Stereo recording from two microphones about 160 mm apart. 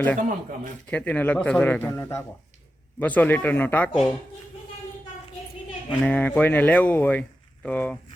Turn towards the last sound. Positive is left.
turn(degrees=10)  # may be behind; listen again after turning